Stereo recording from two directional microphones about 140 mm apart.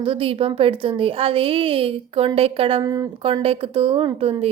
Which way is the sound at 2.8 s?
25° right (ahead or behind).